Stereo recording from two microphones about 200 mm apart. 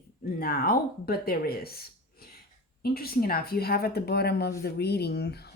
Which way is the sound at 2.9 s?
50° left (ahead or behind).